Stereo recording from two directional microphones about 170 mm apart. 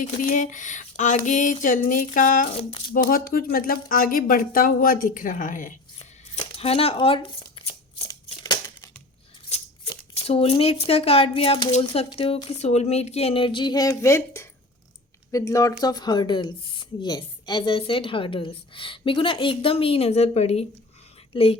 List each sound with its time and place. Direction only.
0.0 s a sound: 50° left (ahead or behind)
2.6 s a woman's voice: 35° left (ahead or behind)
3.1 s speech: 60° left (ahead or behind)
6.4 s speech: 35° left (ahead or behind)
7.6 s shuffling cards: 35° left (ahead or behind)
8.0 s scissors: 20° left (ahead or behind)
10.2 s a woman's voice: 35° left (ahead or behind)